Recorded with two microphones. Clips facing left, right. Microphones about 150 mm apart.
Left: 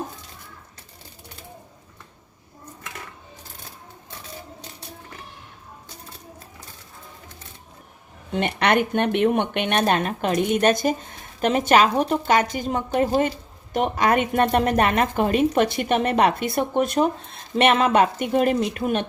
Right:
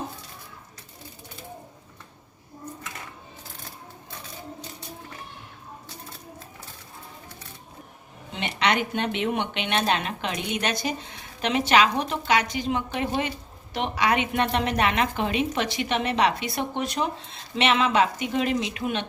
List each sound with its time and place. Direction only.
8.3 s speech: 50° left (ahead or behind)